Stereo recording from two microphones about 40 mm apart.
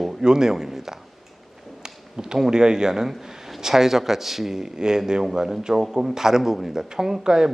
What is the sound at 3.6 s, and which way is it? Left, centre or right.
Speech, centre.